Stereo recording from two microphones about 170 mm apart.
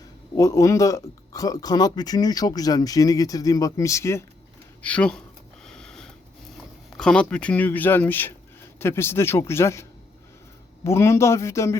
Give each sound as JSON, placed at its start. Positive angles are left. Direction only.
{"t": 0.3, "sound": "speech", "side_deg": 20}
{"t": 5.6, "sound": "a sound", "side_deg": 5}
{"t": 6.9, "sound": "speech", "side_deg": 5}
{"t": 10.8, "sound": "speech", "side_deg": 15}